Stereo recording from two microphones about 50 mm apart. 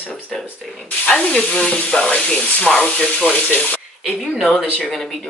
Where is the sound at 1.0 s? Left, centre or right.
Left.